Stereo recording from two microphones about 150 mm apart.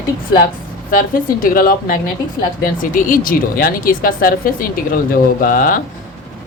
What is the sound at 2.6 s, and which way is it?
Speech, 65° left (ahead or behind).